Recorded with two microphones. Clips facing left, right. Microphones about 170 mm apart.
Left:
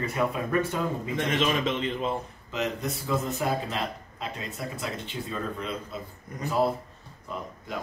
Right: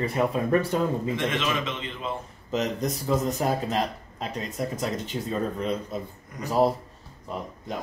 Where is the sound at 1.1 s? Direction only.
45° left (ahead or behind).